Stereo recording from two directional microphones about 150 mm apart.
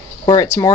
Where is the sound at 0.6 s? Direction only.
25° left (ahead or behind).